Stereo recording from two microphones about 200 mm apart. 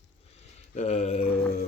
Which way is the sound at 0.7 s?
35° left (ahead or behind).